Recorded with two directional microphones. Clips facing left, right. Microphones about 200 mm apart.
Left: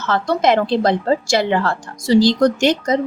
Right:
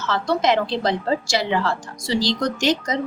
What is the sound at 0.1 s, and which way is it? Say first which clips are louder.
A woman's voice: left 4 dB; 55° left (ahead or behind).